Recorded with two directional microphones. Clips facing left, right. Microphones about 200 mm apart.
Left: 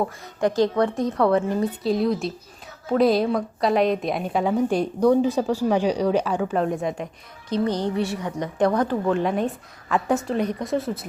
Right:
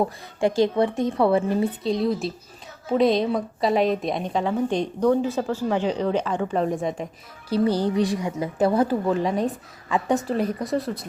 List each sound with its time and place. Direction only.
0.3 s speech: 25° right (ahead or behind)
1.2 s a woman's voice: 10° right (ahead or behind)